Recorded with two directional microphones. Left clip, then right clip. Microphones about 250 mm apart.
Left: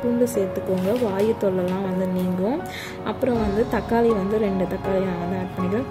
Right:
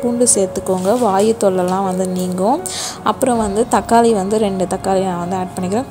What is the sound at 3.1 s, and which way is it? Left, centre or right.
A woman's voice, right.